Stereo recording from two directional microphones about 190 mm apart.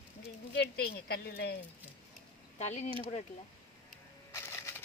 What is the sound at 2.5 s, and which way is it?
Speech, 35° left (ahead or behind).